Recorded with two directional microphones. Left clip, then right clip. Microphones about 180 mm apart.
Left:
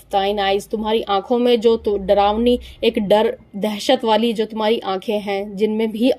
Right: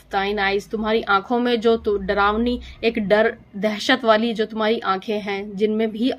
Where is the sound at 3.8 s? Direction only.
25° left (ahead or behind).